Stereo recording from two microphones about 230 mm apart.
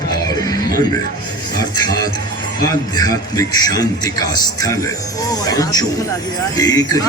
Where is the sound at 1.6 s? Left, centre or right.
Centre.